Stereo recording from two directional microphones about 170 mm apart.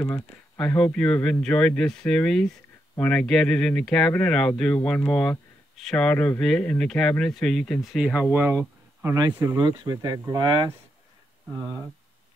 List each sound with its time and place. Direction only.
0.6 s speech: 5° left (ahead or behind); by 11.8 s 25° right (ahead or behind)